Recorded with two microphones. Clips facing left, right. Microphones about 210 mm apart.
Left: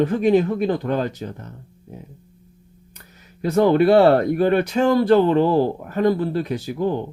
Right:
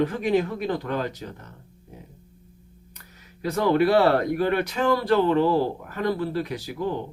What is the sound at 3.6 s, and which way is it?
Speech, 25° left (ahead or behind).